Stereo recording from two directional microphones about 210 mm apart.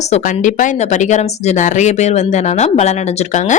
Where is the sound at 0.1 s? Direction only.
35° left (ahead or behind).